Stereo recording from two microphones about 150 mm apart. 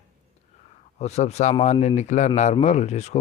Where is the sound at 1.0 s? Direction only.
45° left (ahead or behind).